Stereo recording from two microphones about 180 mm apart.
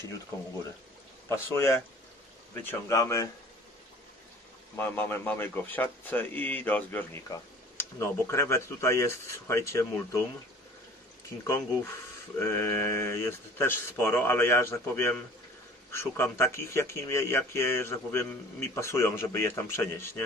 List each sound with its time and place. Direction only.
1.3 s a man's voice: 15° left (ahead or behind)
4.7 s a man's voice: 10° left (ahead or behind)
11.2 s a man's voice: 15° left (ahead or behind)